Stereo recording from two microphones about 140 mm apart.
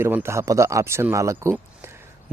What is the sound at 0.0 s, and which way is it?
Speech, 20° right (ahead or behind).